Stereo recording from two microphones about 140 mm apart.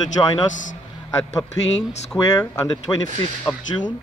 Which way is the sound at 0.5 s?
65° left (ahead or behind).